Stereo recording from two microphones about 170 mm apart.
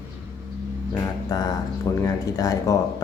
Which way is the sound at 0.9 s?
20° left (ahead or behind).